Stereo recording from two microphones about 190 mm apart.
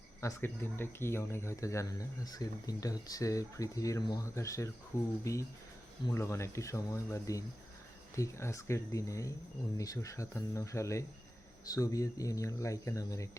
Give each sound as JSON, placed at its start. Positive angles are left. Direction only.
{"t": 0.2, "sound": "speech", "side_deg": 15}